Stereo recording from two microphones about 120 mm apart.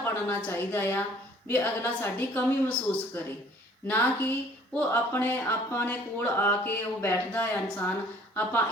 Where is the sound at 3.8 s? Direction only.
15° left (ahead or behind).